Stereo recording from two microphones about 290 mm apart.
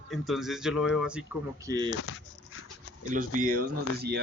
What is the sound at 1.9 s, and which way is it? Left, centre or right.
Dog, left.